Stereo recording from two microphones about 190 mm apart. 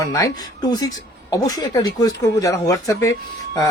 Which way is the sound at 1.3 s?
20° left (ahead or behind).